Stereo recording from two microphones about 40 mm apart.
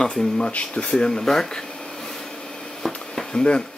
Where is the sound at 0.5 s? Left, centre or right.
Left.